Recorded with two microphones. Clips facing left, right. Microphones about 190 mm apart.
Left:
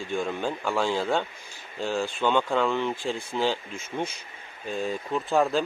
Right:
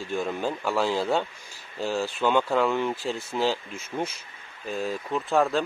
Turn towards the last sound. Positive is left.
turn(degrees=0)  # may be behind; listen again after turning